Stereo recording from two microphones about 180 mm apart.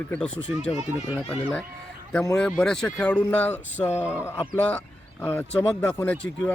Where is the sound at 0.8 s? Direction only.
15° right (ahead or behind).